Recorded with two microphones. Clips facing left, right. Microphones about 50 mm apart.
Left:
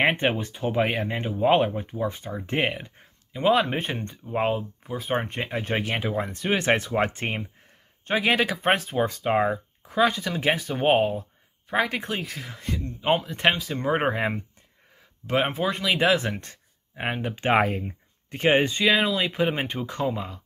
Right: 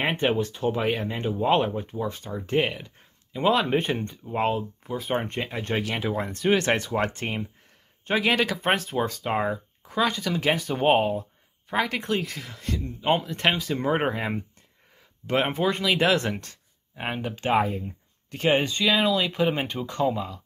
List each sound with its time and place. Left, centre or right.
0.1 s speech: left
1.2 s speech: centre; by 2.9 s left
3.3 s speech: centre
5.8 s speech: left
6.0 s speech: centre; by 7.4 s left
8.1 s speech: centre
11.7 s speech: centre
12.0 s speech: centre
15.2 s speech: centre
16.3 s speech: centre
17.6 s speech: left
18.3 s speech: left
18.9 s speech: centre